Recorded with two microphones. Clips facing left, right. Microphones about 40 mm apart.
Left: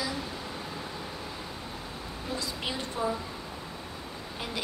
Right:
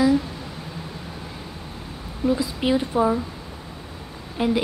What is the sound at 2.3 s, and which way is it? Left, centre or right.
Speech, centre.